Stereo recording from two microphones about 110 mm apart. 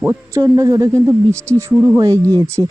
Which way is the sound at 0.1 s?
30° right (ahead or behind).